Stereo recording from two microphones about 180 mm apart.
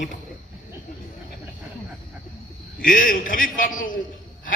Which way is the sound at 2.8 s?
50° left (ahead or behind).